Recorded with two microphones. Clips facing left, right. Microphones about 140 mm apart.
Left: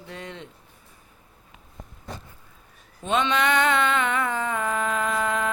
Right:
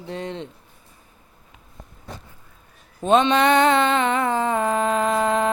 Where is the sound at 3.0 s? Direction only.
35° right (ahead or behind).